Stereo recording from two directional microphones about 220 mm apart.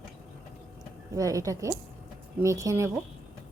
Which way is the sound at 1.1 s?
15° right (ahead or behind).